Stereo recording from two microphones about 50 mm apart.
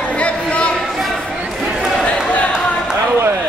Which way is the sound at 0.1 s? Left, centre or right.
Left.